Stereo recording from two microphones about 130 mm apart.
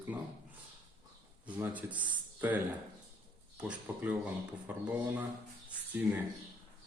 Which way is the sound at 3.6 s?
10° right (ahead or behind).